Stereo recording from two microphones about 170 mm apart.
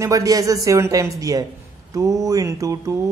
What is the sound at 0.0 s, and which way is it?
A man's voice, 20° right (ahead or behind).